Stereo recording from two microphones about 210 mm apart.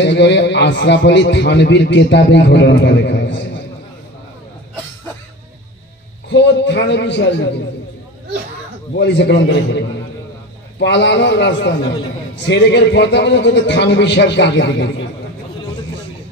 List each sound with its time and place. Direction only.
0.0 s a man's voice: 55° left (ahead or behind)
6.2 s a man's voice: 55° left (ahead or behind)
8.9 s a man's voice: 55° left (ahead or behind)